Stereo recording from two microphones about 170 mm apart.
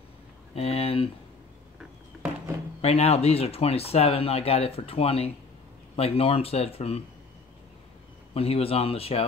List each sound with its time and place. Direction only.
0.6 s speech: 35° left (ahead or behind)
2.8 s speech: 35° left (ahead or behind)
8.4 s speech: 35° left (ahead or behind)